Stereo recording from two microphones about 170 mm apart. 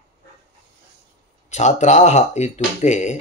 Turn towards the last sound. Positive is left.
turn(degrees=45)  # may be behind; listen again after turning